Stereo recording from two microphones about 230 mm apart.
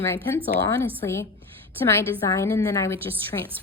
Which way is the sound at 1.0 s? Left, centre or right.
Centre.